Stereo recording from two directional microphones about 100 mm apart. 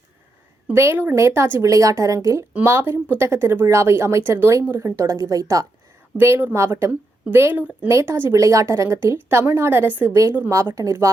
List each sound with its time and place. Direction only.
0.7 s speech: 25° right (ahead or behind)
6.1 s speech: 20° right (ahead or behind)